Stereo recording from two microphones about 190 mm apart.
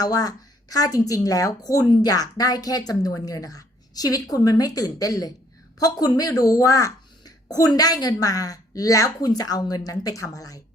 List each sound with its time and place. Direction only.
0.0 s a woman's voice: 20° left (ahead or behind)